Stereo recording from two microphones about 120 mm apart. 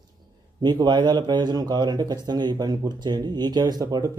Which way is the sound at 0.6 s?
35° right (ahead or behind).